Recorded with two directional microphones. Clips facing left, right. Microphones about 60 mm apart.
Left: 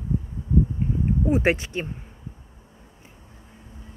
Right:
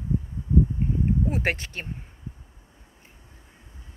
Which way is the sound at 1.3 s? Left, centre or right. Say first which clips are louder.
Left 6 dB; centre.